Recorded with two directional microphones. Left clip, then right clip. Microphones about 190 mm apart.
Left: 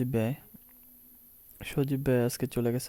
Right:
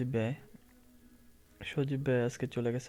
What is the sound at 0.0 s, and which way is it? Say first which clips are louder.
Speech: left 4 dB; 40° left (ahead or behind).